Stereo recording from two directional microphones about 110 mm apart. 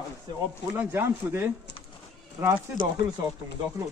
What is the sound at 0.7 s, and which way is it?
Speech, 20° right (ahead or behind).